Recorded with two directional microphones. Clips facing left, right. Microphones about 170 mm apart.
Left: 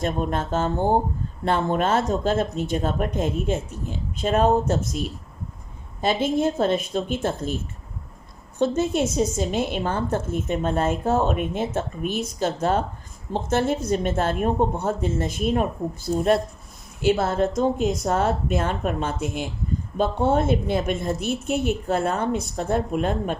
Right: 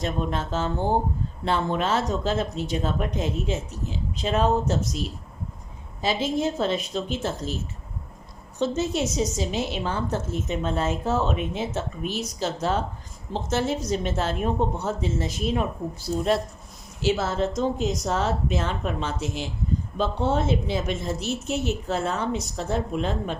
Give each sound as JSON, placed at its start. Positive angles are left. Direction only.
{"t": 0.0, "sound": "a woman's voice", "side_deg": 50}